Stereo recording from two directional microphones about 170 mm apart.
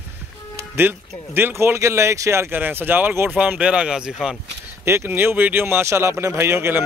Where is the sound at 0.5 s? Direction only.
15° right (ahead or behind).